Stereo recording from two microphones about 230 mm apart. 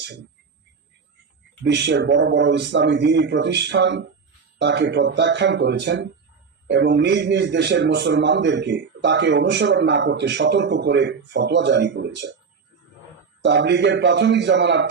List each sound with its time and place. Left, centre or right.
1.6 s a man's voice: right
13.4 s a man's voice: right